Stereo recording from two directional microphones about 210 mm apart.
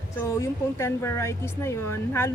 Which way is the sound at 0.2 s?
15° left (ahead or behind).